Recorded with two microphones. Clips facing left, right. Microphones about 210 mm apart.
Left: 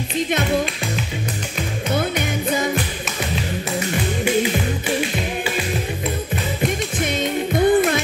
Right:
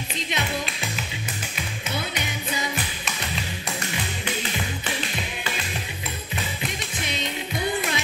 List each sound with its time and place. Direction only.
1.9 s music: 50° left (ahead or behind)
6.6 s music: 50° left (ahead or behind)